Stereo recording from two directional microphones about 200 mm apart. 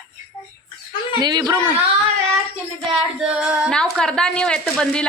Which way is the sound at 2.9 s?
5° right (ahead or behind).